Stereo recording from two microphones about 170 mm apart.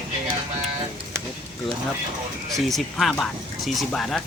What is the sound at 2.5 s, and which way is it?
Speech, centre (ahead or behind).